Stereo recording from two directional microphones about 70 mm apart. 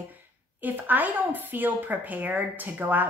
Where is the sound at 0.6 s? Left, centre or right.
Right.